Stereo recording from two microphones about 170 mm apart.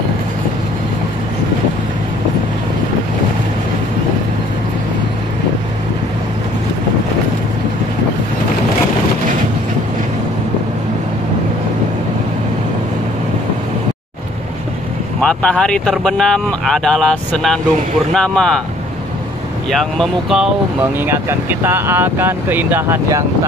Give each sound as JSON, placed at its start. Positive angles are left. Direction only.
{"t": 15.1, "sound": "speech", "side_deg": 5}
{"t": 19.7, "sound": "speech", "side_deg": 0}
{"t": 21.0, "sound": "speech", "side_deg": -15}